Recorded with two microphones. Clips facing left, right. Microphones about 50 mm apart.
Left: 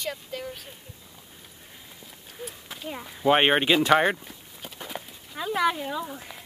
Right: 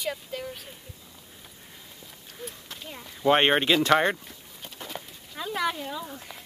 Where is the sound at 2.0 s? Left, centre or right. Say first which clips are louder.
Left 1 dB; centre.